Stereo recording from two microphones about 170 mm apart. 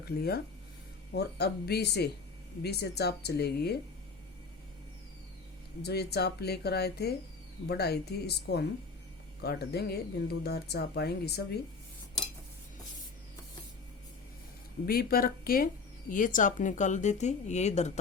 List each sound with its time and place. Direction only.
0.0 s speech: 65° left (ahead or behind)
5.8 s speech: 75° left (ahead or behind)
14.8 s speech: 60° left (ahead or behind); by 17.9 s 40° left (ahead or behind)